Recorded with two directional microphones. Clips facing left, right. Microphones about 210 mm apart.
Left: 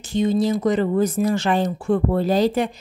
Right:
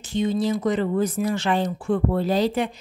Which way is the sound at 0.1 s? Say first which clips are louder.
Left 3 dB; 40° left (ahead or behind).